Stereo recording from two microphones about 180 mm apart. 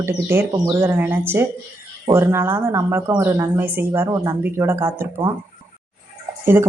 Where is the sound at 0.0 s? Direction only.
15° right (ahead or behind).